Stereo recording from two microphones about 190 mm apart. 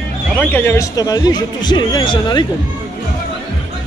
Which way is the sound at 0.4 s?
10° left (ahead or behind).